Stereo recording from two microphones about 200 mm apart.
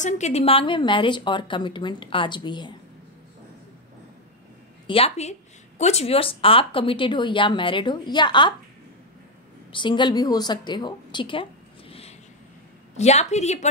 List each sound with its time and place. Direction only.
0.0 s speech: 35° left (ahead or behind)
4.8 s speech: 30° left (ahead or behind)
9.7 s speech: 25° left (ahead or behind)
12.9 s a woman's voice: 35° left (ahead or behind)